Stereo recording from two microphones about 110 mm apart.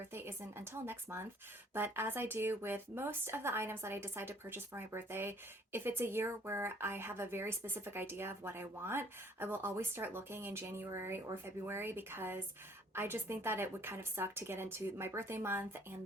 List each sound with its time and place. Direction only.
0.1 s speech: 20° right (ahead or behind)